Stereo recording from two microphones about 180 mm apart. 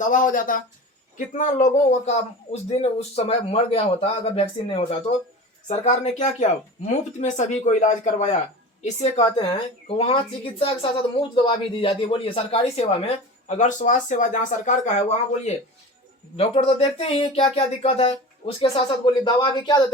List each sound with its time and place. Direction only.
0.0 s speech: 45° left (ahead or behind)
16.4 s speech: 35° left (ahead or behind)